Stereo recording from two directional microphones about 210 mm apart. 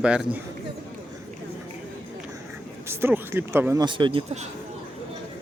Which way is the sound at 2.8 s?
10° right (ahead or behind).